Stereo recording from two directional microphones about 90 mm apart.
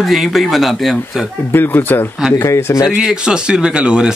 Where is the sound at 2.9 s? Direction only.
10° right (ahead or behind).